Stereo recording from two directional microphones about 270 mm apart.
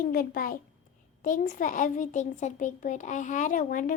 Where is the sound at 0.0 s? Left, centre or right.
Left.